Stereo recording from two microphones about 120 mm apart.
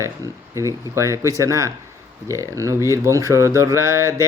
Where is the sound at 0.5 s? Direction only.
25° right (ahead or behind).